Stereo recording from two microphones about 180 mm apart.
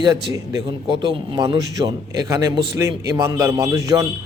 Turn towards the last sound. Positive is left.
turn(degrees=-15)  # may be behind; listen again after turning